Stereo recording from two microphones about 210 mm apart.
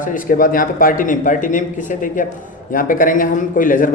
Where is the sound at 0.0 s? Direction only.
40° left (ahead or behind).